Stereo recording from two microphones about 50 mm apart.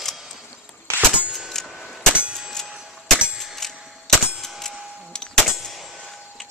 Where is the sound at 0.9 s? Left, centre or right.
Right.